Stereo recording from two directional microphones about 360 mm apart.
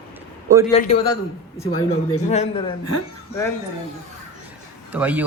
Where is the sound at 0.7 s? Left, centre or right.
Centre.